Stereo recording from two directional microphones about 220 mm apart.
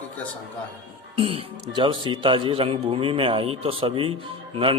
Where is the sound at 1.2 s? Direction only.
25° right (ahead or behind).